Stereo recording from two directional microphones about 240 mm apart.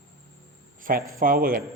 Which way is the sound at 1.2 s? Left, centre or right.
Right.